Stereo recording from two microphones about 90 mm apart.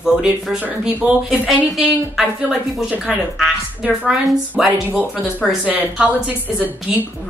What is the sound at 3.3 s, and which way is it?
Speech, 10° right (ahead or behind).